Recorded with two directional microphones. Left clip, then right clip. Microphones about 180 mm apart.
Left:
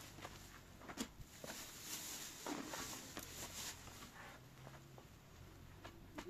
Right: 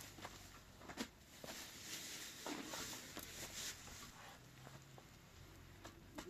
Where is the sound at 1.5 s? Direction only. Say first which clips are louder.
Even; 25° left (ahead or behind).